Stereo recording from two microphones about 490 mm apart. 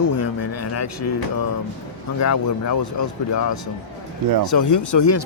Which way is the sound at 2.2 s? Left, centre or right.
Left.